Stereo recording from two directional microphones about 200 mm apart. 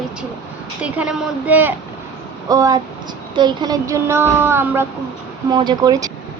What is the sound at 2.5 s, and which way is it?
Speech, 20° right (ahead or behind).